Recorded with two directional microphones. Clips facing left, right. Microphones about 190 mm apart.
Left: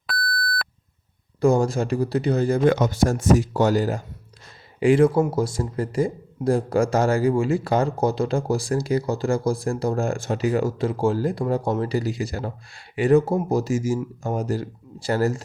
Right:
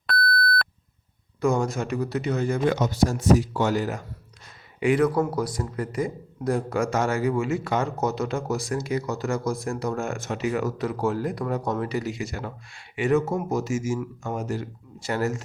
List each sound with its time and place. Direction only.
1.4 s speech: 30° left (ahead or behind)
2.6 s speech: 55° left (ahead or behind); by 15.4 s 35° left (ahead or behind)